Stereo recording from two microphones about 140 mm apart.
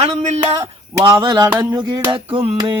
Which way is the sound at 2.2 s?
40° right (ahead or behind).